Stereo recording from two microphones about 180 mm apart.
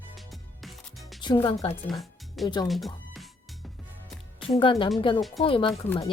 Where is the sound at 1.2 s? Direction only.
25° left (ahead or behind).